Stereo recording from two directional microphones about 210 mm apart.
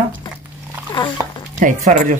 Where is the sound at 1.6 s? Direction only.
40° right (ahead or behind).